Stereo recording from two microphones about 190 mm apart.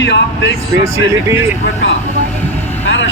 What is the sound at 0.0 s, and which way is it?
Speech, 75° left (ahead or behind).